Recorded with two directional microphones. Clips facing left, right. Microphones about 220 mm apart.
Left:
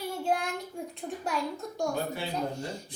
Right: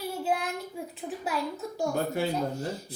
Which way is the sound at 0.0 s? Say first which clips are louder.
Even; 5° right (ahead or behind).